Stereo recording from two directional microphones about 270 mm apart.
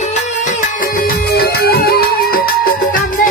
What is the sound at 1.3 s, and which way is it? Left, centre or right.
Music, left.